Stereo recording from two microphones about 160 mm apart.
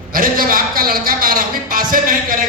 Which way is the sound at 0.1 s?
60° right (ahead or behind).